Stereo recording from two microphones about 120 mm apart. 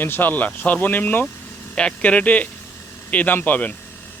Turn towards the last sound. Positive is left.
turn(degrees=15)  # may be behind; listen again after turning